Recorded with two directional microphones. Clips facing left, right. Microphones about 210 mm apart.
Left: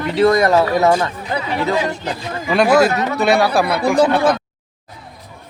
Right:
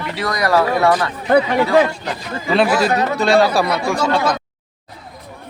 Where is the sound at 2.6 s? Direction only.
50° left (ahead or behind).